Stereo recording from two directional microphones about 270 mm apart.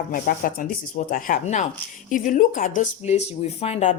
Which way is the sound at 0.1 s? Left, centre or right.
Left.